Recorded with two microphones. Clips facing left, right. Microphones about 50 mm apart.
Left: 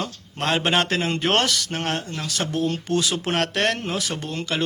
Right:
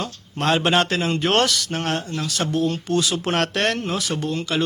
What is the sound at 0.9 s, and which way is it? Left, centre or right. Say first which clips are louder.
Speech: right 1 dB; left.